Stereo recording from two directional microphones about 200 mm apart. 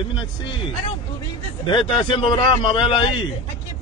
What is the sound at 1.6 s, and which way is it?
A man's voice, 25° left (ahead or behind).